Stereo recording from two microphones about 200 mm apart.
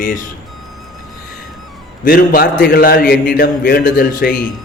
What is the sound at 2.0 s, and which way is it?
A man's voice, 45° left (ahead or behind).